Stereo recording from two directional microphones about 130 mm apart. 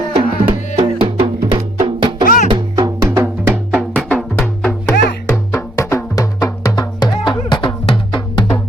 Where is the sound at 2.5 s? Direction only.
30° right (ahead or behind).